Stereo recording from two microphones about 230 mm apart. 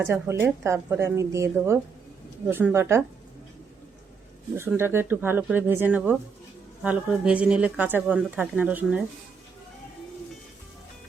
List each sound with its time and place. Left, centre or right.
0.0 s speech: centre
4.5 s speech: centre